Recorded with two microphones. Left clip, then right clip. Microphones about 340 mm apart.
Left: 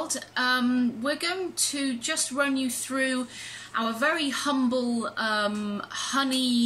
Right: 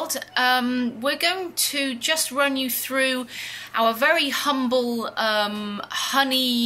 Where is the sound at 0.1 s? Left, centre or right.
Centre.